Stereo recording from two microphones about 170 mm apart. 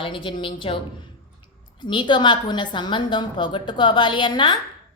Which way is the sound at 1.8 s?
30° left (ahead or behind).